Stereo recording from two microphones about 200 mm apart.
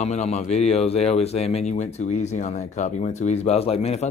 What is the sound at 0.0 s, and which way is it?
Speech, 35° left (ahead or behind).